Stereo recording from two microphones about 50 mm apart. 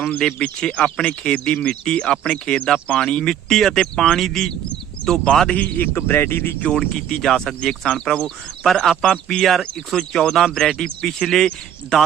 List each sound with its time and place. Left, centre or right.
0.3 s speech: centre
5.5 s a man's voice: left
6.6 s speech: centre
6.9 s speech: centre